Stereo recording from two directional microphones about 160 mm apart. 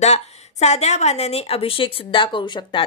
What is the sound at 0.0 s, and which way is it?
Speech, 45° left (ahead or behind).